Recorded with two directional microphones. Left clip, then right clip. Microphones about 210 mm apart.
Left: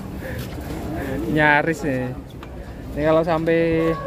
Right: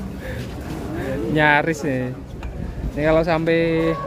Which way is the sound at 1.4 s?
5° right (ahead or behind).